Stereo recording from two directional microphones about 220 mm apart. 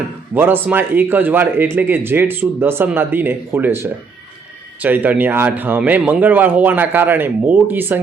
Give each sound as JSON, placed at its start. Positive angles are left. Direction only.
{"t": 0.3, "sound": "speech", "side_deg": -10}